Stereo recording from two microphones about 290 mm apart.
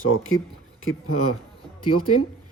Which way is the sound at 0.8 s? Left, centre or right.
Left.